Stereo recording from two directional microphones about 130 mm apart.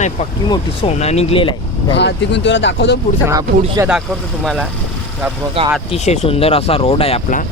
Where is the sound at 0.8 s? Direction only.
55° left (ahead or behind).